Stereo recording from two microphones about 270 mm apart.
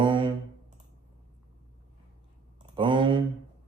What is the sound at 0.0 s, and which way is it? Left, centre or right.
Music, centre.